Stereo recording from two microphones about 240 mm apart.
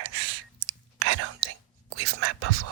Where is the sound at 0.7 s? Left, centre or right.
Right.